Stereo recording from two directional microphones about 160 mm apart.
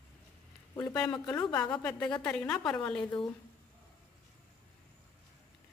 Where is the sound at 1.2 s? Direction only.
10° left (ahead or behind).